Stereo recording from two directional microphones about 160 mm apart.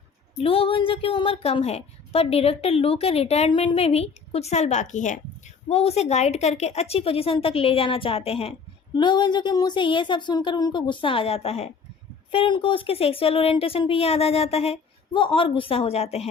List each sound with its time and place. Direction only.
0.3 s a woman's voice: 35° left (ahead or behind)